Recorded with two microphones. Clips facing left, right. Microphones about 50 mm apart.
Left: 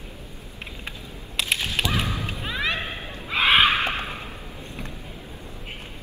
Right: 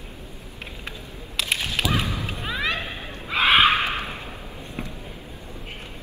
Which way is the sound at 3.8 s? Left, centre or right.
Left.